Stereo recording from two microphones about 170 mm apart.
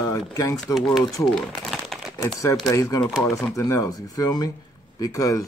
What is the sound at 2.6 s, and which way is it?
Speech, 20° left (ahead or behind).